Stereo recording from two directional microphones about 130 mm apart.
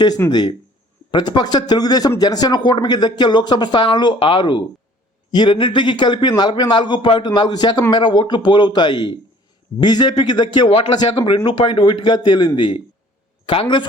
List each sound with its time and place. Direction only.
0.3 s a man's voice: 35° left (ahead or behind)